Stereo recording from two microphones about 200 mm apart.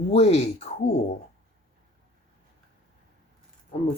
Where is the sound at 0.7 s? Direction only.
30° left (ahead or behind).